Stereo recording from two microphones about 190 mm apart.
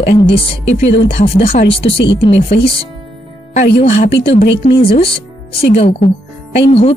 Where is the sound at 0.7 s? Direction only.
70° left (ahead or behind).